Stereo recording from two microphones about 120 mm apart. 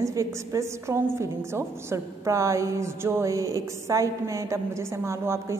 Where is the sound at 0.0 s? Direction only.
25° right (ahead or behind).